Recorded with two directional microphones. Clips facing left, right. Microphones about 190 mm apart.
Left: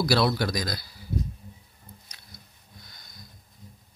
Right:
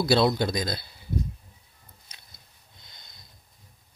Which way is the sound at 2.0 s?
25° right (ahead or behind).